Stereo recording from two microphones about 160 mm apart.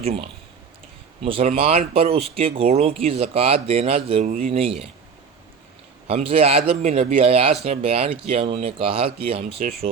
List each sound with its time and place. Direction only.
0.0 s speech: 40° right (ahead or behind)
6.1 s speech: 35° right (ahead or behind)